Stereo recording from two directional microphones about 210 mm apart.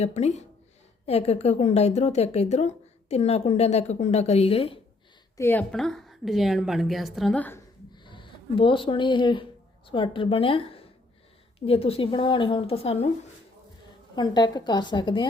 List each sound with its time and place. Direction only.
0.0 s a woman's voice: 30° left (ahead or behind)
5.4 s a woman's voice: 10° left (ahead or behind)
7.9 s a woman's voice: 20° left (ahead or behind)
14.2 s a woman's voice: 20° left (ahead or behind)